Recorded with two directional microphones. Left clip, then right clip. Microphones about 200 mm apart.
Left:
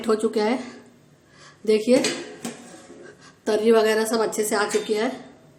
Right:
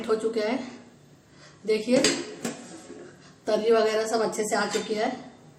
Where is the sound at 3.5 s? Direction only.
50° left (ahead or behind).